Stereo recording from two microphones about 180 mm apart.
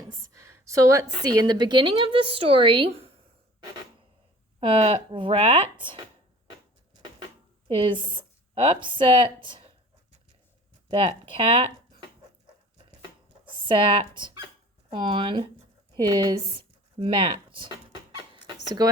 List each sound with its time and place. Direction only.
0.1 s a woman's voice: 15° right (ahead or behind)
4.6 s speech: 30° right (ahead or behind)
7.7 s a woman's voice: 30° right (ahead or behind)
10.9 s speech: 30° right (ahead or behind)
13.4 s a woman's voice: 30° right (ahead or behind)
18.8 s speech: 20° right (ahead or behind)